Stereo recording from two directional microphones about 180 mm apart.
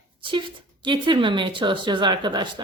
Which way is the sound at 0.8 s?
25° right (ahead or behind).